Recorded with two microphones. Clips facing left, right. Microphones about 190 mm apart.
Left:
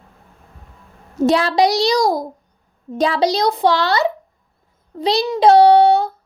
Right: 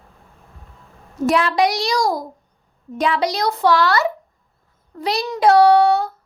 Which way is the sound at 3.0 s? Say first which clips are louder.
Left 3 dB; 30° left (ahead or behind).